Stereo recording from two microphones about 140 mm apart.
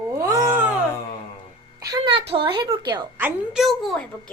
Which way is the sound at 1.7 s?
25° right (ahead or behind).